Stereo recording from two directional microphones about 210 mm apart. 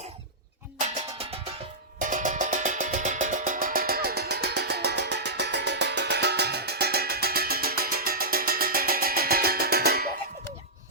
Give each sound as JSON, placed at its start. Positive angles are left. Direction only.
{"t": 0.8, "sound": "music", "side_deg": -35}